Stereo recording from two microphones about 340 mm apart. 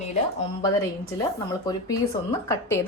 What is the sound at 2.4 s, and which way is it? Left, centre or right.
Speech, centre.